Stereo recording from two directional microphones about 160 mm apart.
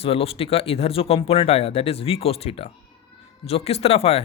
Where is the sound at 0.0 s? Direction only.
35° left (ahead or behind).